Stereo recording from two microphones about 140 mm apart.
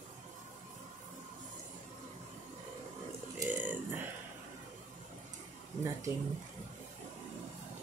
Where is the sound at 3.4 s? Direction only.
10° right (ahead or behind).